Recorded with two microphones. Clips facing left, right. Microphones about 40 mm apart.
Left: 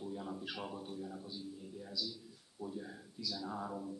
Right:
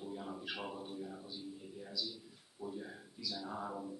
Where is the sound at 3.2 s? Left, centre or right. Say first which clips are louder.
Left 1 dB; centre.